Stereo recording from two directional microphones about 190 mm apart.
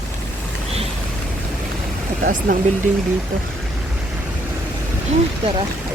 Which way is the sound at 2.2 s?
50° right (ahead or behind).